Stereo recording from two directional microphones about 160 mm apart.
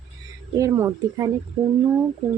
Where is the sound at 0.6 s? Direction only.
20° right (ahead or behind).